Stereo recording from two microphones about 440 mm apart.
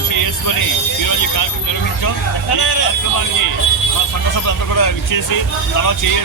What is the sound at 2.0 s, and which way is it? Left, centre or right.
Speech, left.